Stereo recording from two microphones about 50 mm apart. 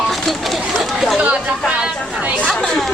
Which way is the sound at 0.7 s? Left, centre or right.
Centre.